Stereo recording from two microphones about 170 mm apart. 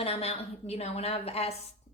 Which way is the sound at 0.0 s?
35° left (ahead or behind).